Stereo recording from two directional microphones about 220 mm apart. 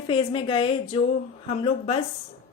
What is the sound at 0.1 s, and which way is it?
Speech, 25° left (ahead or behind).